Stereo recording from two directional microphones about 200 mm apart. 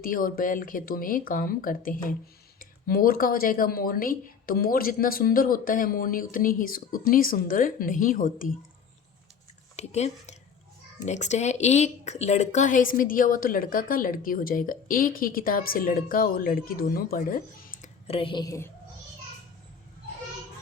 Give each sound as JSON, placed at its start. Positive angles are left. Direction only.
{"t": 0.0, "sound": "a woman's voice", "side_deg": 45}
{"t": 9.7, "sound": "a woman's voice", "side_deg": 35}
{"t": 18.1, "sound": "a woman's voice", "side_deg": 25}